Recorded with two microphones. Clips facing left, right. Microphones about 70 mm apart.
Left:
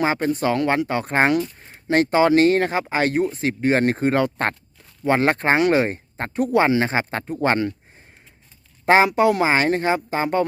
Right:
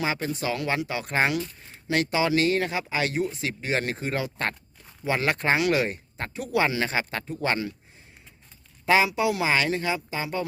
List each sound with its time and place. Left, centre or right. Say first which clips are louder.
0.0 s speech: left 7 dB; left
8.9 s speech: left 6 dB; left